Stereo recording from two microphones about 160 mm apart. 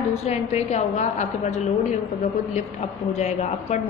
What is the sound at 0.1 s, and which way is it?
A woman's voice, 45° left (ahead or behind).